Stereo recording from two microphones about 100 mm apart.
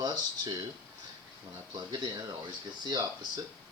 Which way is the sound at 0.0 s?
40° right (ahead or behind).